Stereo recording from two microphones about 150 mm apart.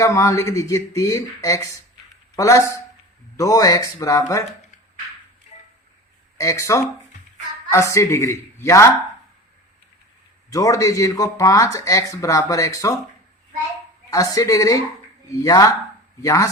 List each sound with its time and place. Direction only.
0.0 s speech: 20° left (ahead or behind)
6.3 s speech: 20° left (ahead or behind)
10.5 s speech: 25° left (ahead or behind)
14.1 s speech: 20° left (ahead or behind)